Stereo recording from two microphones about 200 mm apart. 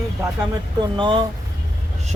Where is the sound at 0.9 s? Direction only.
25° right (ahead or behind).